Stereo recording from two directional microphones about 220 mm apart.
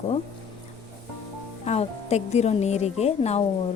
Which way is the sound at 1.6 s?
30° left (ahead or behind).